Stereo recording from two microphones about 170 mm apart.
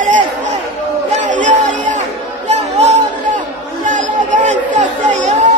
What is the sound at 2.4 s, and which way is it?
Chatter, 45° right (ahead or behind).